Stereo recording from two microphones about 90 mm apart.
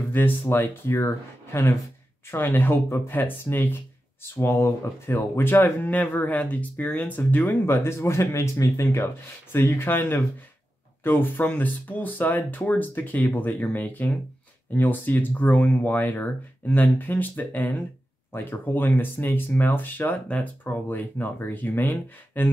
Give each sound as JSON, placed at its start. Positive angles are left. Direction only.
{"t": 0.1, "sound": "speech", "side_deg": 25}